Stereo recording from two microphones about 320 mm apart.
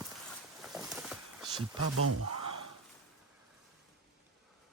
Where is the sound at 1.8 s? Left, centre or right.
Right.